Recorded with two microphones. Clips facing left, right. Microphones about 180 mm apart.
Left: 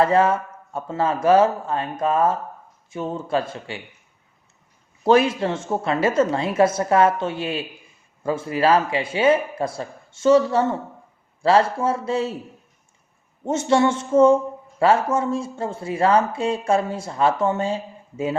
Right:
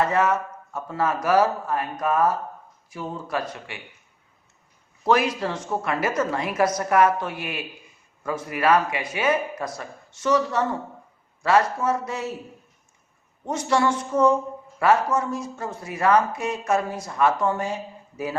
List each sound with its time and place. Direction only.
0.0 s speech: 30° left (ahead or behind)
5.0 s speech: 25° left (ahead or behind)
13.4 s speech: 25° left (ahead or behind)